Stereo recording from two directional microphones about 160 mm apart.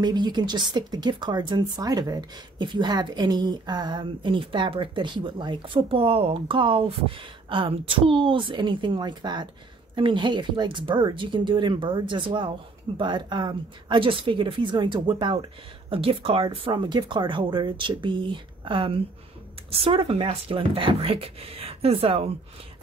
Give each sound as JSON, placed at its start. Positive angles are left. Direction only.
{"t": 0.0, "sound": "speech", "side_deg": -25}